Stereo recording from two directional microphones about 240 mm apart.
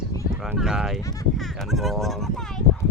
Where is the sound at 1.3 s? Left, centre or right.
Centre.